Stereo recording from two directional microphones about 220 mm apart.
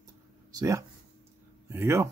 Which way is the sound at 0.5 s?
15° right (ahead or behind).